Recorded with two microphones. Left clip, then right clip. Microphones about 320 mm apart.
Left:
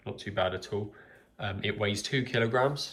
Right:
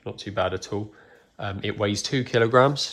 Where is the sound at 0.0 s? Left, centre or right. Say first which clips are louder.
Right 4 dB; centre.